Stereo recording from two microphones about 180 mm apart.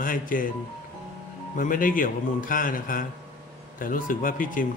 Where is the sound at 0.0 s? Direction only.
50° left (ahead or behind).